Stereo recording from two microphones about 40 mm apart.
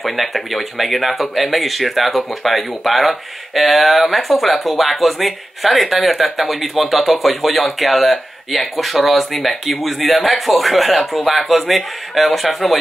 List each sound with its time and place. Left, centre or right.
0.0 s speech: centre